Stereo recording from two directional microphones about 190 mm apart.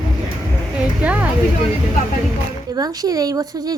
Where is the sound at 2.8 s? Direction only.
20° right (ahead or behind).